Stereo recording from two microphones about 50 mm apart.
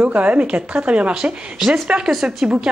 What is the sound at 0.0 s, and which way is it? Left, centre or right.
Speech, right.